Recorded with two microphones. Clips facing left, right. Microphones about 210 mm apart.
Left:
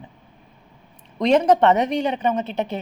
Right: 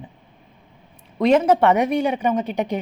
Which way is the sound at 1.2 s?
5° right (ahead or behind).